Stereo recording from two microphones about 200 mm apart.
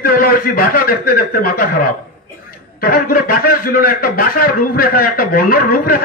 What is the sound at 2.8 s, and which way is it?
A man's voice, 45° left (ahead or behind).